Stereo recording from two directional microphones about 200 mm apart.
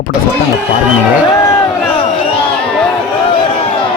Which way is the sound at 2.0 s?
30° left (ahead or behind).